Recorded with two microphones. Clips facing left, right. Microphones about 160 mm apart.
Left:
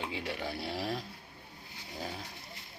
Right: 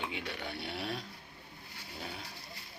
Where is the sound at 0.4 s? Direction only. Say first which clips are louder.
Left 3 dB; 35° left (ahead or behind).